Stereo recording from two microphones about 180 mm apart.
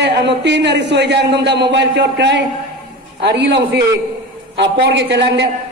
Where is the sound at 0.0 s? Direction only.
70° right (ahead or behind).